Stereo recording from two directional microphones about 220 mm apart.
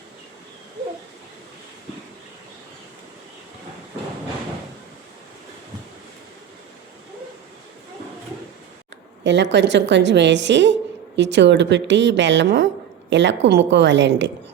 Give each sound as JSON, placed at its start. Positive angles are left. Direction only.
{"t": 9.2, "sound": "a woman's voice", "side_deg": -55}